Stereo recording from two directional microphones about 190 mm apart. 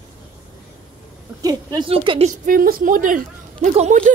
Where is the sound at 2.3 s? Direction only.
45° right (ahead or behind).